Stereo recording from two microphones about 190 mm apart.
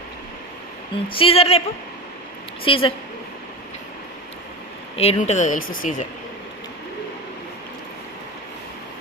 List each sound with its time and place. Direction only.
1.0 s speech: 30° left (ahead or behind)
2.6 s a woman's voice: 30° left (ahead or behind)
4.9 s speech: 30° left (ahead or behind)